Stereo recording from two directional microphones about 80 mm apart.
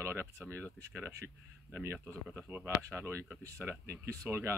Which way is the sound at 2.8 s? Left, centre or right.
Right.